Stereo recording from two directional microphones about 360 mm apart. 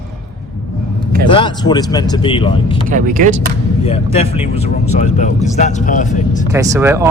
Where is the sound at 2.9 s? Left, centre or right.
Right.